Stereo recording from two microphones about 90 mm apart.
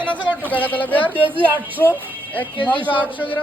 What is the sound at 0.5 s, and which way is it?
Speech, 20° left (ahead or behind).